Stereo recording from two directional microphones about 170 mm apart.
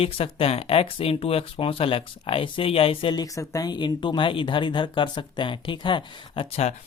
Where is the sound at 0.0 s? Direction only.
35° left (ahead or behind).